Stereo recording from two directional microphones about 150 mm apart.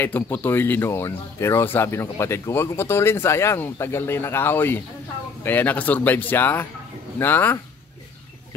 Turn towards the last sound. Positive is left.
turn(degrees=15)  # may be behind; listen again after turning